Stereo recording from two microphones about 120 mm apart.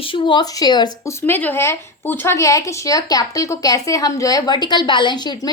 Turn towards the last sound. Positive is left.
turn(degrees=35)  # may be behind; listen again after turning